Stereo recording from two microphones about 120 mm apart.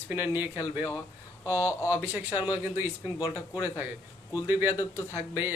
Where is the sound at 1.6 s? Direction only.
20° left (ahead or behind).